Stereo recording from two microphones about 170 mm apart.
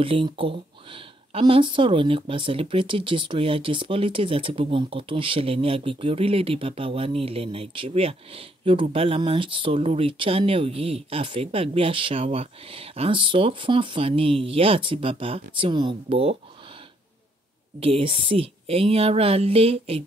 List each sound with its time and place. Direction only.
0.0 s speech: 30° right (ahead or behind)
17.7 s speech: 35° right (ahead or behind)